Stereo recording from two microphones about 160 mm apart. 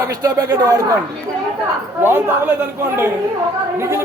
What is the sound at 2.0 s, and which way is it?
A man's voice, 15° right (ahead or behind).